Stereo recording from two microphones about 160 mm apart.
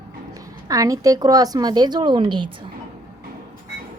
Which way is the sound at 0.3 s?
20° right (ahead or behind).